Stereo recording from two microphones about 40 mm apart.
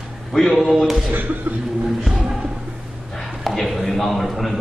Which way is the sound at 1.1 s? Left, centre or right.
Right.